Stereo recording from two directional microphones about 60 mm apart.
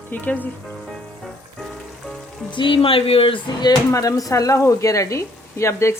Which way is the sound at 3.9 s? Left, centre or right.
Left.